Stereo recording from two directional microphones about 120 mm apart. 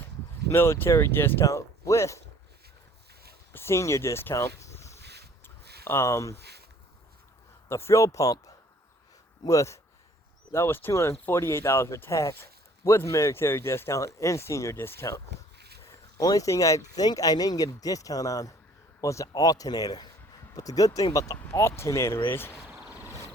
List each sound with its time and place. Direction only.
0.4 s speech: 20° left (ahead or behind)
3.5 s speech: 20° left (ahead or behind)
7.7 s speech: 25° left (ahead or behind)
15.8 s speech: 30° left (ahead or behind)